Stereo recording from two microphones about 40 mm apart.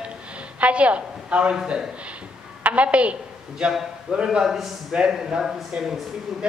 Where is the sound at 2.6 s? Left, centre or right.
Right.